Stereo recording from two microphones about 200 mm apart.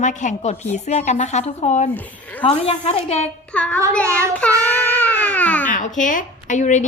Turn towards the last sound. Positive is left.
turn(degrees=40)  # may be behind; listen again after turning